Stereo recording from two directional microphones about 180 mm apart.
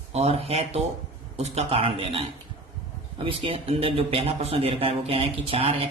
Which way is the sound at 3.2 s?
30° right (ahead or behind).